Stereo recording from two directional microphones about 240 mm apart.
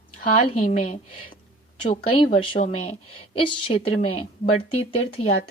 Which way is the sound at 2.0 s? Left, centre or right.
Left.